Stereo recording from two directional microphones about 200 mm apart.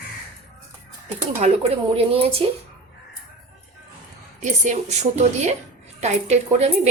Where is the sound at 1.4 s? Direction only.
30° right (ahead or behind).